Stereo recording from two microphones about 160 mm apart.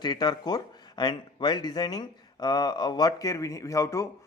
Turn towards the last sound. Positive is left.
turn(degrees=20)  # may be behind; listen again after turning